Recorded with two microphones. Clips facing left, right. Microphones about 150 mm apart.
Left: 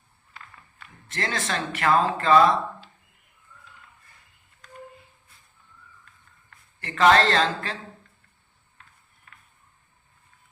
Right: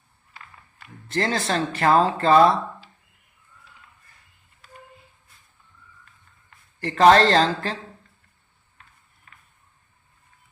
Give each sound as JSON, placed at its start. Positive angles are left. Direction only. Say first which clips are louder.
{"t": 1.0, "sound": "speech", "louder": "right 6 dB", "side_deg": -35}
{"t": 4.6, "sound": "a sound", "louder": "left 1 dB", "side_deg": -5}
{"t": 6.7, "sound": "speech", "louder": "right 4 dB", "side_deg": -35}